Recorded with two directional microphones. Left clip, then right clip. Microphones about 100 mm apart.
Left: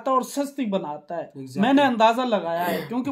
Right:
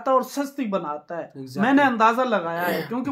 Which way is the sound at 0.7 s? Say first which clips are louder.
Right 1 dB; 45° left (ahead or behind).